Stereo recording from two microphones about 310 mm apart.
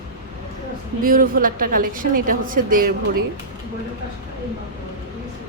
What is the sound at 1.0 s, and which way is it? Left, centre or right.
Speech, right.